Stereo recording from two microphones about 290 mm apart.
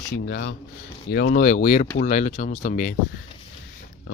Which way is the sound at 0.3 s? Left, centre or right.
Left.